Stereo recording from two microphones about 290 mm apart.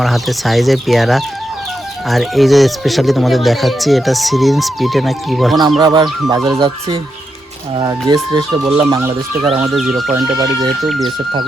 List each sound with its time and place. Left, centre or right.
0.0 s speech: centre
5.8 s speech: centre
10.6 s speech: centre